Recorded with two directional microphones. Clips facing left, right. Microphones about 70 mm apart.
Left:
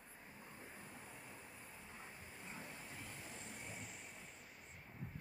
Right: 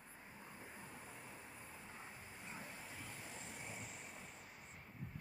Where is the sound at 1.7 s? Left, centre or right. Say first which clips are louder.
Right 1 dB; right.